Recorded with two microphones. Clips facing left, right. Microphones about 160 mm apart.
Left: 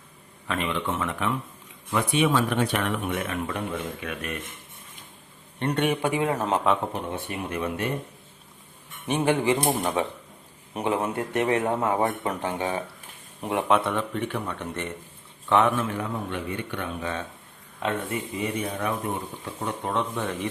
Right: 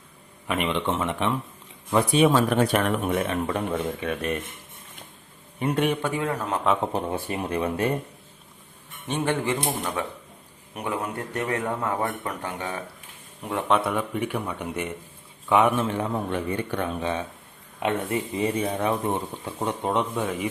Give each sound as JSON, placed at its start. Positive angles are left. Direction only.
{"t": 0.4, "sound": "speech", "side_deg": -15}
{"t": 1.9, "sound": "speech", "side_deg": -35}
{"t": 5.5, "sound": "a man's voice", "side_deg": -5}
{"t": 6.0, "sound": "speech", "side_deg": 15}
{"t": 6.9, "sound": "speech", "side_deg": -35}
{"t": 9.0, "sound": "speech", "side_deg": 15}
{"t": 13.7, "sound": "a man's voice", "side_deg": 0}
{"t": 13.9, "sound": "speech", "side_deg": -10}
{"t": 15.8, "sound": "speech", "side_deg": -25}
{"t": 16.3, "sound": "speech", "side_deg": -40}
{"t": 17.0, "sound": "speech", "side_deg": -20}